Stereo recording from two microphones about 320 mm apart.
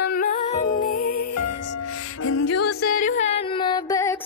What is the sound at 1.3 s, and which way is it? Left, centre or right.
Music, left.